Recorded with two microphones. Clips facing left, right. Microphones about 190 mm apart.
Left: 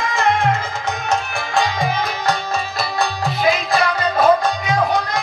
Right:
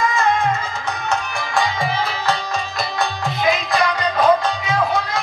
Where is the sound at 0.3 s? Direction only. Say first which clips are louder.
Left 4 dB; 90° left.